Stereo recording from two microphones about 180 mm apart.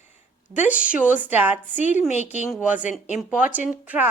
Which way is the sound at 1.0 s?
10° right (ahead or behind).